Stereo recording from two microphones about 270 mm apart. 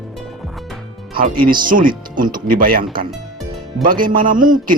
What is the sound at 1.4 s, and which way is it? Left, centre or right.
A man's voice, right.